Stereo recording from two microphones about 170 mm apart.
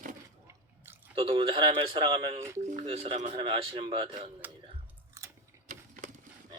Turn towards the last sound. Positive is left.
turn(degrees=-15)  # may be behind; listen again after turning